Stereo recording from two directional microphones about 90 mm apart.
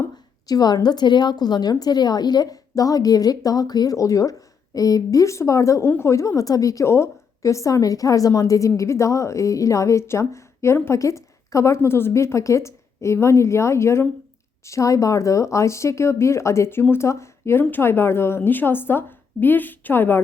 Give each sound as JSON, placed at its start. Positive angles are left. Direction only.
{"t": 0.4, "sound": "a woman's voice", "side_deg": 45}